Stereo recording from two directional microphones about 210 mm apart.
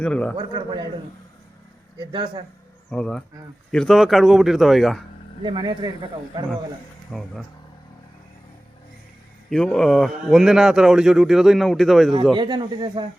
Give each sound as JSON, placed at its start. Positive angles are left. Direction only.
{"t": 0.0, "sound": "speech", "side_deg": 5}
{"t": 0.3, "sound": "speech", "side_deg": -20}
{"t": 2.0, "sound": "speech", "side_deg": -20}
{"t": 2.9, "sound": "speech", "side_deg": 5}
{"t": 5.4, "sound": "speech", "side_deg": -20}
{"t": 7.1, "sound": "speech", "side_deg": 0}
{"t": 9.5, "sound": "speech", "side_deg": 5}
{"t": 12.3, "sound": "speech", "side_deg": -20}